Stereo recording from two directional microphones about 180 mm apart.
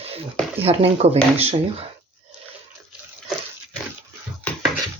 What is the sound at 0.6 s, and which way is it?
Speech, 35° right (ahead or behind).